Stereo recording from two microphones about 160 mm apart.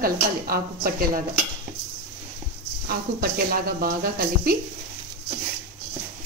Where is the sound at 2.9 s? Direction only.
70° right (ahead or behind).